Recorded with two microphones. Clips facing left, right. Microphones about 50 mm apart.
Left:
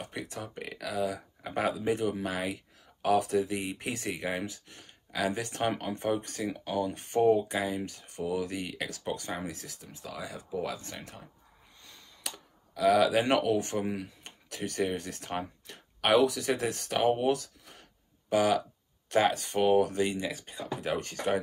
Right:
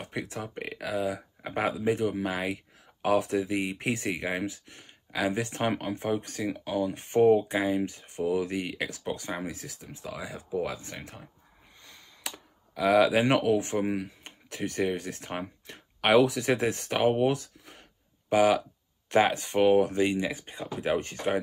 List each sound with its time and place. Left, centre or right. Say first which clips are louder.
0.0 s speech: right 3 dB; right
6.5 s speech: right 3 dB; centre
6.8 s speech: right 4 dB; right
11.8 s a sound: right 2 dB; right
12.7 s speech: right 2 dB; right